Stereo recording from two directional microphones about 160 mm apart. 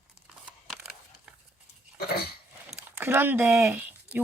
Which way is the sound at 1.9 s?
75° left (ahead or behind).